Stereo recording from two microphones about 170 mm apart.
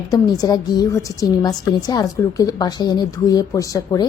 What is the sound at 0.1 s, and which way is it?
A woman's voice, 20° left (ahead or behind).